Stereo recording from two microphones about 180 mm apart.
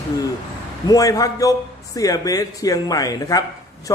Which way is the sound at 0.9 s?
20° left (ahead or behind).